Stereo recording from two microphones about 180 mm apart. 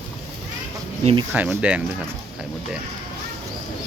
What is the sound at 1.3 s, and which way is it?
Speech, 5° right (ahead or behind).